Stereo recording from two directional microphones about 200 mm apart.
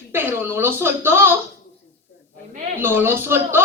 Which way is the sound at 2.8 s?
10° right (ahead or behind).